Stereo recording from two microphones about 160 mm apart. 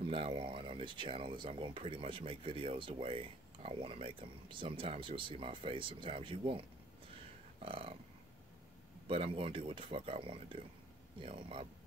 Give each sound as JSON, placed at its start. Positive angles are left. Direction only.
{"t": 0.0, "sound": "speech", "side_deg": -35}
{"t": 7.6, "sound": "speech", "side_deg": -35}
{"t": 9.0, "sound": "speech", "side_deg": -35}